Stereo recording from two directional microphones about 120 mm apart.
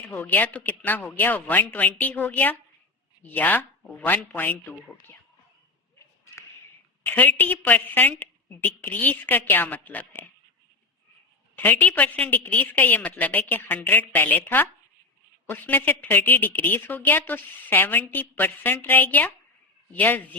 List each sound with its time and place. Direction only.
0.1 s a woman's voice: 15° left (ahead or behind)
7.0 s a woman's voice: 15° left (ahead or behind)
11.5 s a woman's voice: 15° left (ahead or behind)